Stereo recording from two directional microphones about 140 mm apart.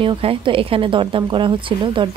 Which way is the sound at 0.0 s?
40° right (ahead or behind).